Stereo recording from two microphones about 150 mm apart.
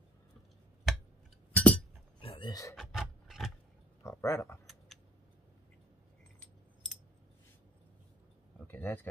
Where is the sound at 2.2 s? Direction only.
35° left (ahead or behind).